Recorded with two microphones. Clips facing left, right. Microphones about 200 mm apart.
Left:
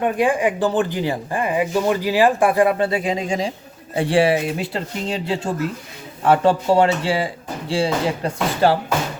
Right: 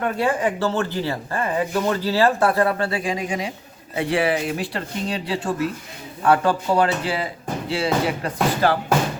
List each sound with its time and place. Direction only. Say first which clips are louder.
0.0 s speech: left 3 dB; 15° left (ahead or behind)